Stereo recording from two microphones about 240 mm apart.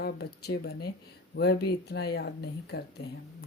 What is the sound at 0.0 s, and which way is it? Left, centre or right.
Speech, left.